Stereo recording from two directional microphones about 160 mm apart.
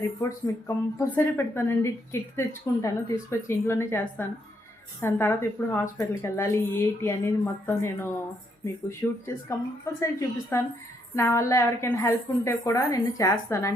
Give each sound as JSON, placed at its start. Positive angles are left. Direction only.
{"t": 0.2, "sound": "a woman's voice", "side_deg": 15}